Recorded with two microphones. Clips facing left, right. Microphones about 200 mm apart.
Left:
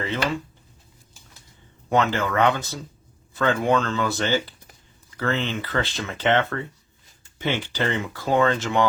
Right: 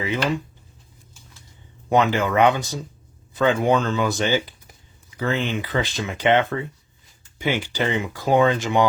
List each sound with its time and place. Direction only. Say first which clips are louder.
0.0 s speech: right 2 dB; 15° right (ahead or behind)
1.9 s speech: right 3 dB; 15° right (ahead or behind)